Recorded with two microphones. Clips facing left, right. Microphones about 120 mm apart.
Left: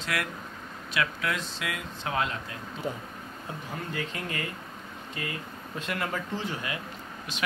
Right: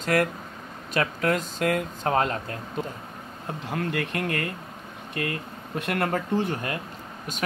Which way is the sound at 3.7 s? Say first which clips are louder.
Right 7 dB; 75° right (ahead or behind).